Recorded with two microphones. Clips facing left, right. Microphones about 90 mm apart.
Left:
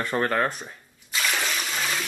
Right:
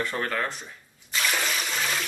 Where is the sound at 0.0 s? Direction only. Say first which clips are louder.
Left 4 dB; 40° left (ahead or behind).